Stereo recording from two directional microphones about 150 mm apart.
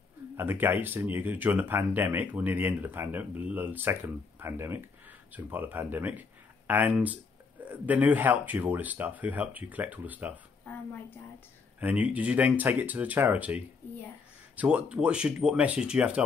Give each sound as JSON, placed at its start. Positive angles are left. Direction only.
{"t": 0.4, "sound": "speech", "side_deg": -15}
{"t": 11.8, "sound": "speech", "side_deg": -10}